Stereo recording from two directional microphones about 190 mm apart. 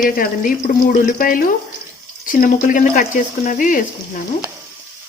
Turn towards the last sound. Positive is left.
turn(degrees=45)  # may be behind; listen again after turning